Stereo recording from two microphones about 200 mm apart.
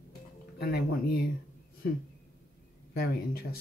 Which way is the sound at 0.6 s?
50° left (ahead or behind).